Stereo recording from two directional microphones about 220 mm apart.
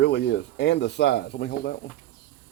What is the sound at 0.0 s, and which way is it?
Speech, 50° left (ahead or behind).